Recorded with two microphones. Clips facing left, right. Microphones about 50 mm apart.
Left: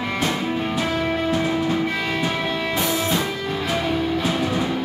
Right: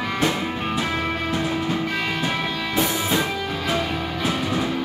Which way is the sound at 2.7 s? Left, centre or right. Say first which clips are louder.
Right 2 dB; centre.